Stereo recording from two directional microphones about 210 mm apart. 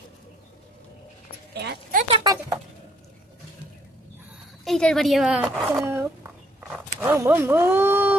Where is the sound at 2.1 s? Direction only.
15° right (ahead or behind).